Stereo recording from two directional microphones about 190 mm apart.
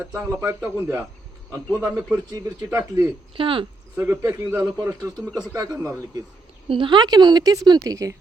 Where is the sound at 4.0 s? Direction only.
10° right (ahead or behind).